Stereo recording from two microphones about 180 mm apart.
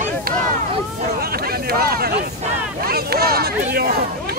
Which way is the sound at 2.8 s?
60° right (ahead or behind).